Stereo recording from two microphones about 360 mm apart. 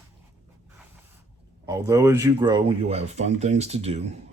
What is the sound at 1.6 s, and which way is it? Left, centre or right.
Speech, centre.